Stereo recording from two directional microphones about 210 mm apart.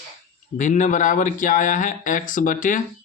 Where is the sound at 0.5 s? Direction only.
35° left (ahead or behind).